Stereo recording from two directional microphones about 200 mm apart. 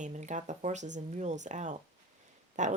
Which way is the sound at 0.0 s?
35° right (ahead or behind).